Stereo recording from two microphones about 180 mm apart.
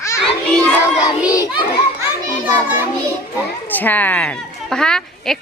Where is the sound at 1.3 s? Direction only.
20° left (ahead or behind).